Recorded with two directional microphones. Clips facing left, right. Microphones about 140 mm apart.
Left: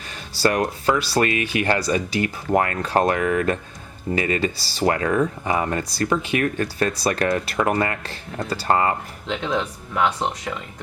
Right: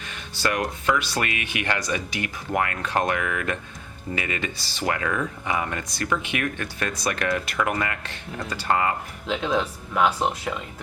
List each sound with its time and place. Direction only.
0.1 s speech: 35° left (ahead or behind)
9.2 s speech: 5° right (ahead or behind)